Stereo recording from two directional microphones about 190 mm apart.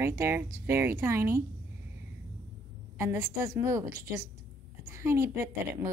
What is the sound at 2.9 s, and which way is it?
A woman's voice, 15° right (ahead or behind).